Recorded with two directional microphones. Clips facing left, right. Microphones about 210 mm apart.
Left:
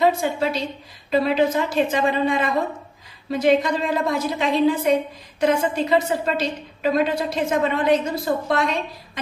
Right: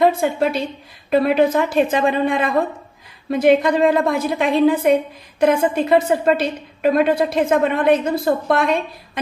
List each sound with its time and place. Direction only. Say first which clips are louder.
0.0 s a woman's voice: right 3 dB; 55° right (ahead or behind)